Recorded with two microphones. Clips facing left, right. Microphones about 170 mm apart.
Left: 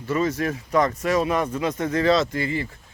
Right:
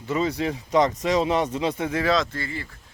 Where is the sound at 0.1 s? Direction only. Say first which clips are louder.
Left 1 dB; 15° right (ahead or behind); by 2.3 s centre (ahead or behind).